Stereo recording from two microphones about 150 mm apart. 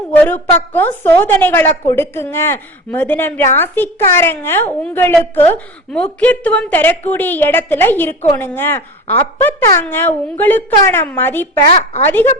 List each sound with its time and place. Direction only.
0.2 s a woman's voice: 10° left (ahead or behind)